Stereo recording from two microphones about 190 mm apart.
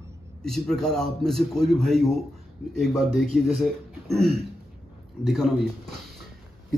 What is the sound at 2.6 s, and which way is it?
Speech, 40° left (ahead or behind).